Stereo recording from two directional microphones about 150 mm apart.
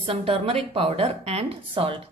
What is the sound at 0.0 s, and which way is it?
A woman's voice, 40° right (ahead or behind).